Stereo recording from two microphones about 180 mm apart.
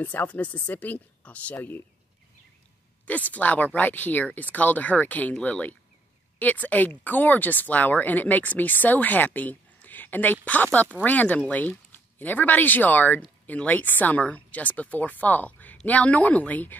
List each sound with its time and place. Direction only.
0.0 s speech: 10° left (ahead or behind)
3.1 s speech: 10° left (ahead or behind)